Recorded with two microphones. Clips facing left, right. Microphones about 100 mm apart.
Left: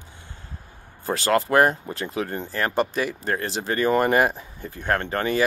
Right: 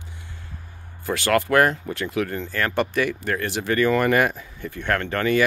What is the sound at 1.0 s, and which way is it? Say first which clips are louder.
Speech: even; 35° left (ahead or behind).